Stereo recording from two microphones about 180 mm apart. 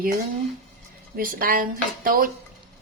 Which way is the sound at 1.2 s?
55° right (ahead or behind).